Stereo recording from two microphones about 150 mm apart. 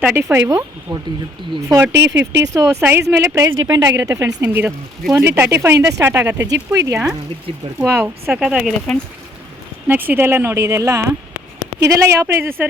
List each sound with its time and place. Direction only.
0.0 s speech: 10° right (ahead or behind)
4.4 s speech: 10° right (ahead or behind)